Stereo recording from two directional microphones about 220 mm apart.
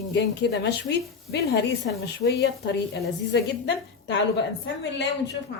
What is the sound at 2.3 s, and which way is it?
A woman's voice, 50° left (ahead or behind).